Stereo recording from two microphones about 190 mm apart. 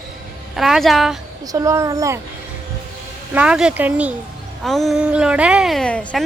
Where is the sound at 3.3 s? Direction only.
5° right (ahead or behind).